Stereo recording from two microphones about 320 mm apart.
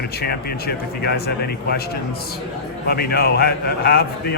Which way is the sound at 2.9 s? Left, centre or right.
Left.